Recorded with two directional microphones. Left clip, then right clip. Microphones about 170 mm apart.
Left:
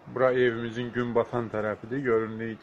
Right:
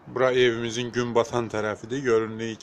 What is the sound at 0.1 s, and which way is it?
Speech, 20° right (ahead or behind).